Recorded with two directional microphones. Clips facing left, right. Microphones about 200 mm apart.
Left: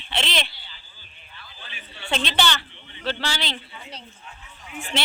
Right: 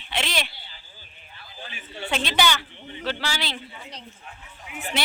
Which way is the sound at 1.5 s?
45° right (ahead or behind).